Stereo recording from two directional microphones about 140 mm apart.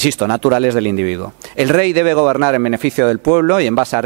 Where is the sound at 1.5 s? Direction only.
Centre (ahead or behind).